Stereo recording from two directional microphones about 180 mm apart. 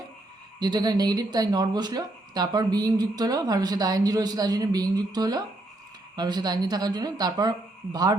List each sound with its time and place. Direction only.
0.6 s speech: 25° right (ahead or behind)